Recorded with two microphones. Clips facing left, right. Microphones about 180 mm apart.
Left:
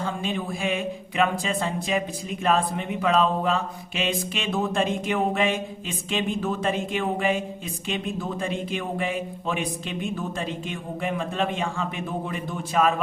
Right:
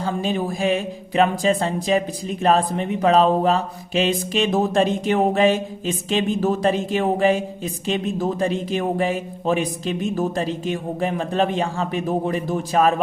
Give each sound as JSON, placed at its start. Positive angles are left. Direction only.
{"t": 0.0, "sound": "speech", "side_deg": -40}